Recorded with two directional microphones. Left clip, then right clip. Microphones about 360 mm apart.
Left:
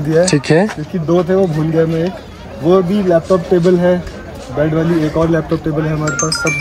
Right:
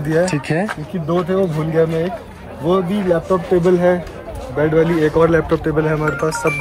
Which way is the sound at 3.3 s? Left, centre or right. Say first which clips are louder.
Left 3 dB; centre.